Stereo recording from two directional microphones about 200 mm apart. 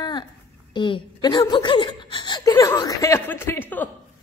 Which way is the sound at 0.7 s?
25° left (ahead or behind).